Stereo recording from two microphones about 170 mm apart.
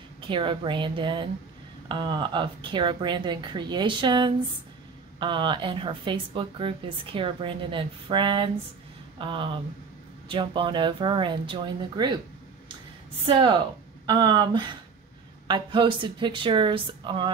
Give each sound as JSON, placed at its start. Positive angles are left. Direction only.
{"t": 0.2, "sound": "speech", "side_deg": -30}
{"t": 13.3, "sound": "speech", "side_deg": -30}